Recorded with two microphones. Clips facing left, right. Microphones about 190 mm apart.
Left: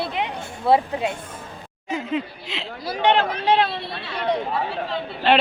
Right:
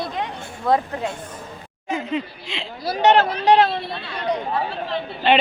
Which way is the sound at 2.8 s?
40° right (ahead or behind).